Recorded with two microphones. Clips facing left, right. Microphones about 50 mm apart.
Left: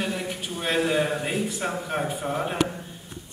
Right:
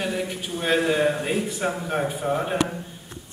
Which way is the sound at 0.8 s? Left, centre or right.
Right.